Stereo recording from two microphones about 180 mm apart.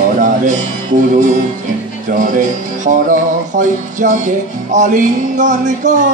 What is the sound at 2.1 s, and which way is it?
Music, 45° right (ahead or behind).